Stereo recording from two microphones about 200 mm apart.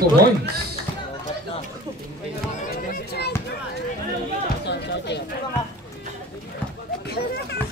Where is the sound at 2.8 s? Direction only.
50° left (ahead or behind).